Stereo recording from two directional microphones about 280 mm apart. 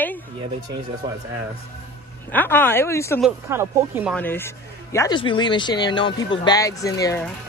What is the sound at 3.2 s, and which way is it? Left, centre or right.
Speech, centre.